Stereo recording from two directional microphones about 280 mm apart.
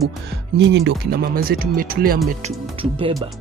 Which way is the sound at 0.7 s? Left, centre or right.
Right.